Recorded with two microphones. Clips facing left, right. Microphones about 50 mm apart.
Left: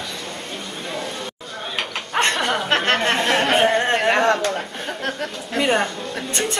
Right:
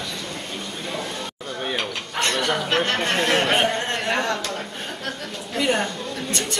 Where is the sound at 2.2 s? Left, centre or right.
Left.